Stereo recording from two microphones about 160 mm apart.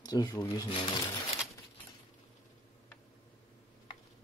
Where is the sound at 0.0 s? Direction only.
25° left (ahead or behind).